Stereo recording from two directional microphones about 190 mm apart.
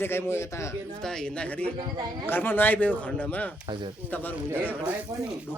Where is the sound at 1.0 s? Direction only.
5° left (ahead or behind).